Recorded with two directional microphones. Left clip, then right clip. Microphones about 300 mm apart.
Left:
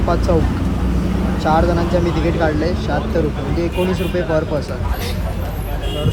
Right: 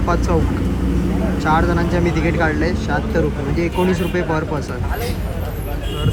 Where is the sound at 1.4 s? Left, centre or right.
Centre.